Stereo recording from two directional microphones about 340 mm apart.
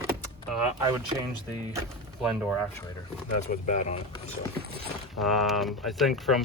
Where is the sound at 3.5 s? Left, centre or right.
Left.